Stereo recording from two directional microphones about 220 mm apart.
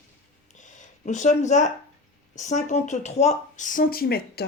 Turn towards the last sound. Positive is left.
turn(degrees=45)  # may be behind; listen again after turning